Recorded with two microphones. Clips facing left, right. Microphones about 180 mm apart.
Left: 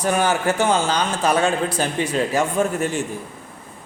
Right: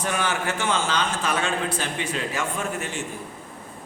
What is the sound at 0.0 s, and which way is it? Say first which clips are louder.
A man's voice: left 7 dB; 40° left (ahead or behind).